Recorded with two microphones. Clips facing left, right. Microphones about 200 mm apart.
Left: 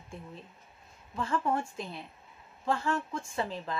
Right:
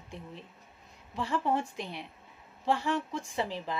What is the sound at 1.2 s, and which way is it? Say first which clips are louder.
A woman's voice: right 1 dB; 15° right (ahead or behind).